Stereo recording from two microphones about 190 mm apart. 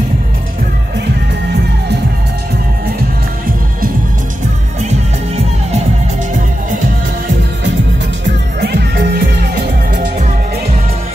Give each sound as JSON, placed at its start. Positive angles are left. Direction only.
{"t": 8.5, "sound": "music", "side_deg": -60}